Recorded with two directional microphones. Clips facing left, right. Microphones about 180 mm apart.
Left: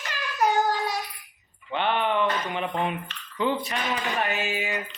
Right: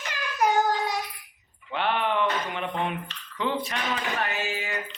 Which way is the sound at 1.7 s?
Centre (ahead or behind).